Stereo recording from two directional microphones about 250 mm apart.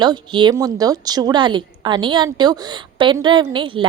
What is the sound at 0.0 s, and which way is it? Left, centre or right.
A woman's voice, centre.